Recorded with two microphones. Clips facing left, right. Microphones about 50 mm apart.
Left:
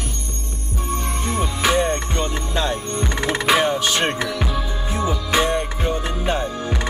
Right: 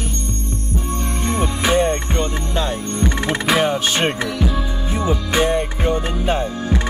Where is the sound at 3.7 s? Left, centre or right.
Centre.